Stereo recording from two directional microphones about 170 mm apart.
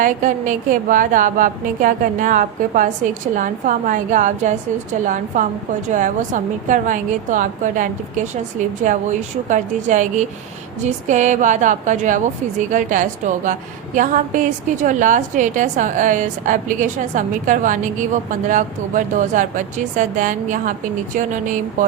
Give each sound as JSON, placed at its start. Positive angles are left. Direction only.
{"t": 0.0, "sound": "a woman's voice", "side_deg": -50}